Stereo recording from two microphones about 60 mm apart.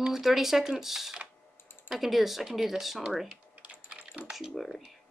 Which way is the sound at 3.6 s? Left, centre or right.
Centre.